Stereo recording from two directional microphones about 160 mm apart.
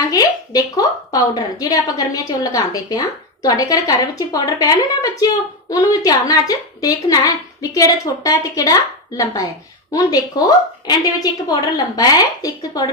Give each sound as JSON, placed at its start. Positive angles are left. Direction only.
{"t": 0.0, "sound": "a woman's voice", "side_deg": 20}